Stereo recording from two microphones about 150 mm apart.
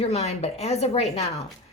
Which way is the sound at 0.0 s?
45° left (ahead or behind).